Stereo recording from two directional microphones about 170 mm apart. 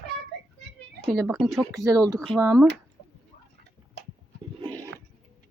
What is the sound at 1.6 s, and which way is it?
Speech, 20° right (ahead or behind).